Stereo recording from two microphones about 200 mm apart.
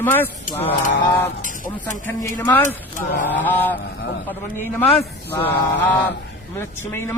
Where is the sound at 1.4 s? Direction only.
40° left (ahead or behind).